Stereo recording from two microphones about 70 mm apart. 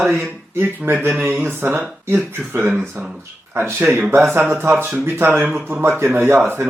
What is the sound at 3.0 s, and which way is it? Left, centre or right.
Speech, centre.